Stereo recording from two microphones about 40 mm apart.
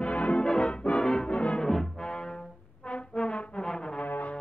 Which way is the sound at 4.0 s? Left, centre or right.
Left.